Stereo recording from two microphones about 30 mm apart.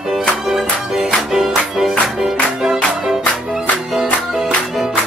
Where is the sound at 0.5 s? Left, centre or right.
Centre.